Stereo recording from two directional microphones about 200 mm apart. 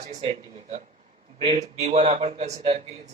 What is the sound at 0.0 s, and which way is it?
A man's voice, 30° right (ahead or behind).